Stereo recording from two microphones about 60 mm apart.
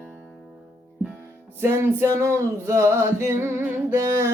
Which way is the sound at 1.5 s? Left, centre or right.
Right.